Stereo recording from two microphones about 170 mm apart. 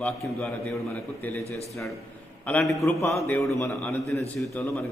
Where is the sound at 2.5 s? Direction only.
10° left (ahead or behind).